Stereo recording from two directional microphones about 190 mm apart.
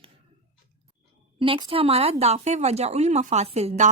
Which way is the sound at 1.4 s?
25° right (ahead or behind).